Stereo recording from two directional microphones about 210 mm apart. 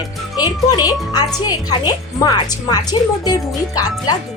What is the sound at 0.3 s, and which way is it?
Speech, 20° left (ahead or behind).